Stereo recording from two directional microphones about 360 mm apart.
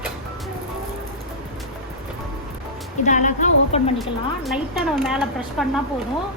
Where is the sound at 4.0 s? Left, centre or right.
Centre.